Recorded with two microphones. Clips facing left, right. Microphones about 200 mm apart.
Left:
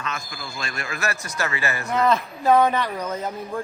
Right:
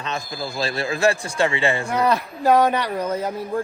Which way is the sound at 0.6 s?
30° right (ahead or behind).